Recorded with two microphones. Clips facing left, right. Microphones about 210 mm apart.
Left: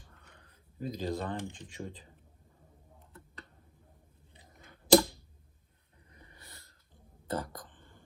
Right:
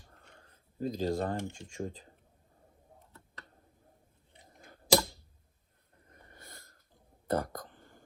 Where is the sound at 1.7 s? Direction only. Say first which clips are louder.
Right 4 dB; 45° right (ahead or behind).